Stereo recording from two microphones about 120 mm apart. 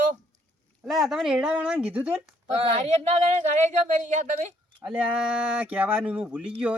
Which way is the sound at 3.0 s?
65° right (ahead or behind).